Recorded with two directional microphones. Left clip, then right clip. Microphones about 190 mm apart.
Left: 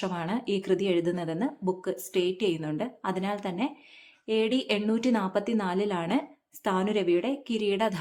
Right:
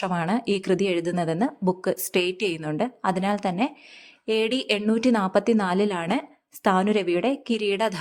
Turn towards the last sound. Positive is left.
turn(degrees=-30)  # may be behind; listen again after turning